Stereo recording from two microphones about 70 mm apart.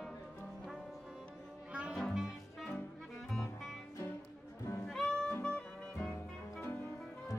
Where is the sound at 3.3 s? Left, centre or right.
Centre.